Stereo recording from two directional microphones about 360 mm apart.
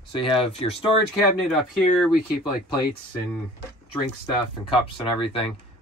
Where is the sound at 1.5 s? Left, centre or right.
Centre.